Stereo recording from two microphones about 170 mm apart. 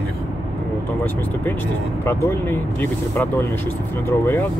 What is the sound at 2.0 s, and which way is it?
Speech, 15° left (ahead or behind).